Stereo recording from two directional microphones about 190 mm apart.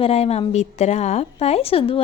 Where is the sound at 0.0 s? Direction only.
30° left (ahead or behind).